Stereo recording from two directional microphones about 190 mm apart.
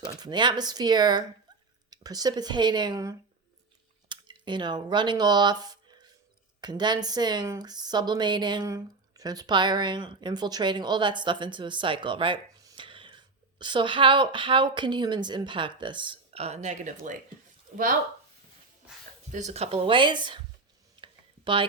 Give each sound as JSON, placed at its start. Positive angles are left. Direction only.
{"t": 0.1, "sound": "speech", "side_deg": -20}
{"t": 19.3, "sound": "speech", "side_deg": -35}
{"t": 21.0, "sound": "a sound", "side_deg": -25}